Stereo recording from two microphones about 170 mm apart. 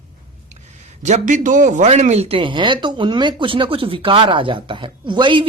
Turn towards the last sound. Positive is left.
turn(degrees=-25)  # may be behind; listen again after turning